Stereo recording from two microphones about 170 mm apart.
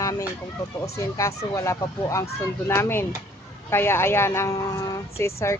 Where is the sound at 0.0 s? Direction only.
20° left (ahead or behind).